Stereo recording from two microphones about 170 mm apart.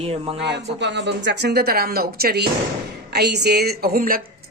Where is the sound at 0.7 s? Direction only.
90° right; by 2.4 s 65° right (ahead or behind).